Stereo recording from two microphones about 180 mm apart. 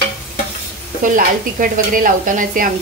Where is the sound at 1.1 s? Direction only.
50° right (ahead or behind).